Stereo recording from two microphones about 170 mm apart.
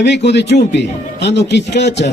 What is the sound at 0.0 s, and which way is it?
A man's voice, 90° left.